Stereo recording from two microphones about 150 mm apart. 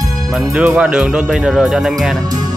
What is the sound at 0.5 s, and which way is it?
Speech, 5° right (ahead or behind).